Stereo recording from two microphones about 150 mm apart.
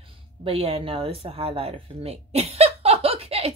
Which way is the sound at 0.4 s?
40° right (ahead or behind).